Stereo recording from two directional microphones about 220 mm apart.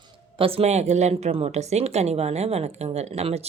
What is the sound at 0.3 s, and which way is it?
A woman's voice, 25° right (ahead or behind).